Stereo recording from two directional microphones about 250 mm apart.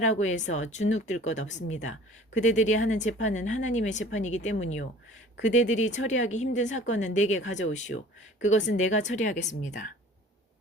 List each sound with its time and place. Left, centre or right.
0.2 s speech: left
5.6 s speech: left